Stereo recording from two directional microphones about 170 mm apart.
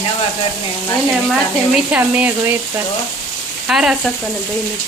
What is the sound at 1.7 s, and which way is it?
Speech, 10° right (ahead or behind).